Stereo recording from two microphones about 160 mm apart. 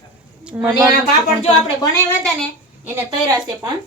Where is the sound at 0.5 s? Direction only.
10° right (ahead or behind).